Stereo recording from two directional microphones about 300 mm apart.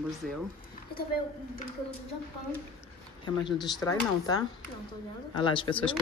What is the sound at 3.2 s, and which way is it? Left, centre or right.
Speech, centre.